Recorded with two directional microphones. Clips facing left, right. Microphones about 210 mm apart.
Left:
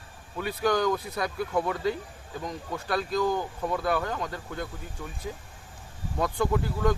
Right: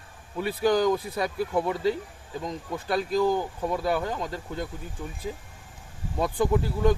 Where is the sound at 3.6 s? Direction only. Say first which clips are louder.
Right 1 dB; 15° right (ahead or behind).